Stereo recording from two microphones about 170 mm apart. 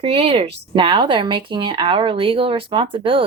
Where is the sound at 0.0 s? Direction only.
35° right (ahead or behind).